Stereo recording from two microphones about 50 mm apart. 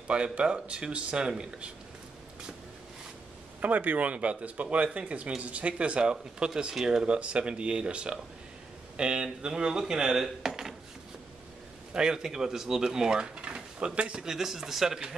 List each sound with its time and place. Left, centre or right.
0.1 s speech: right
3.6 s speech: right; by 10.7 s centre
11.9 s speech: centre
14.3 s speech: centre